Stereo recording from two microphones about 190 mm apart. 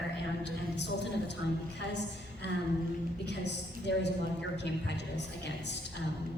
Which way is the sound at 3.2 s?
65° left (ahead or behind).